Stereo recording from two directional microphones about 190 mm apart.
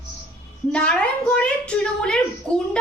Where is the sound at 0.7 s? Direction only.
5° left (ahead or behind).